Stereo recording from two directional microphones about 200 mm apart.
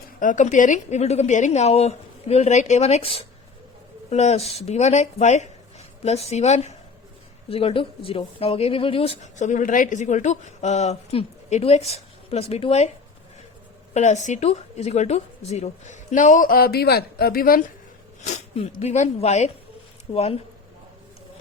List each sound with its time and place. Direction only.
0.2 s speech: 40° left (ahead or behind)
13.9 s speech: 35° left (ahead or behind)
18.3 s speech: 35° left (ahead or behind)